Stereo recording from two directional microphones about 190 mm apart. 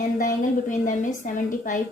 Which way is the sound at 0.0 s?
40° left (ahead or behind).